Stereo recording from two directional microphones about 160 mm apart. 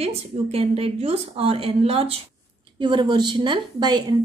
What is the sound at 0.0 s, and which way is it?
A woman's voice, 35° right (ahead or behind).